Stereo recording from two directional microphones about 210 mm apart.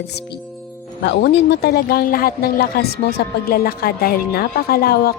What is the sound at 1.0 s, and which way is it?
Speech, 55° left (ahead or behind).